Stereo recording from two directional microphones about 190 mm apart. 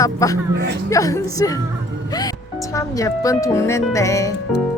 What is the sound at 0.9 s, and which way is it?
Speech, 15° left (ahead or behind).